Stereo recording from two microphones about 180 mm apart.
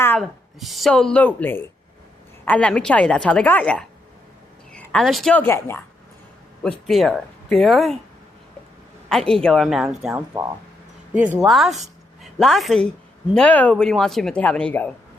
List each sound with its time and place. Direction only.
0.2 s a woman's voice: centre (ahead or behind)
9.0 s a woman's voice: 5° left (ahead or behind)